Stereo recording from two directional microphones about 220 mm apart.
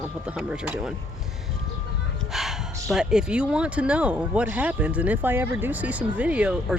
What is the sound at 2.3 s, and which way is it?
Speech, centre (ahead or behind).